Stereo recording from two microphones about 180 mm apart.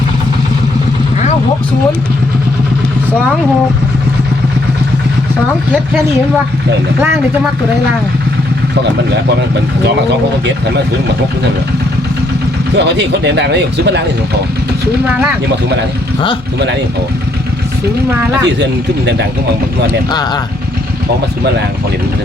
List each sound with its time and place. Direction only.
12.7 s speech: 70° right (ahead or behind)
18.4 s speech: 75° right (ahead or behind)
20.1 s speech: 25° left (ahead or behind)